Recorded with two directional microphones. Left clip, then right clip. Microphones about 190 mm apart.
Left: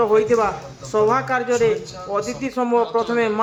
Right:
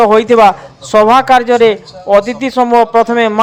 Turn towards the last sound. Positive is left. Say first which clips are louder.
# right 10 dB
turn(degrees=-35)  # may be behind; listen again after turning